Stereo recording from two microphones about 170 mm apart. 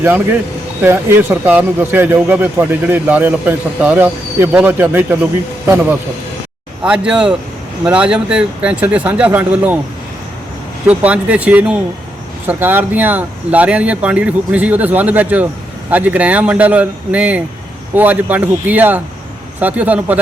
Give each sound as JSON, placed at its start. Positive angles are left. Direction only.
{"t": 0.0, "sound": "a man's voice", "side_deg": -10}
{"t": 10.8, "sound": "a man's voice", "side_deg": -5}